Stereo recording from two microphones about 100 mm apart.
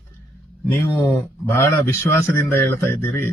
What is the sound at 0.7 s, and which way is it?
A man's voice, 20° left (ahead or behind).